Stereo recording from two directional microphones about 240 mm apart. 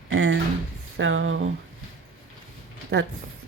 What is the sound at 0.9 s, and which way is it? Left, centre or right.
Speech, right.